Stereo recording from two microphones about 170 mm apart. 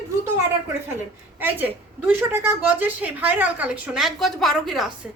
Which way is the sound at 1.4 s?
10° right (ahead or behind).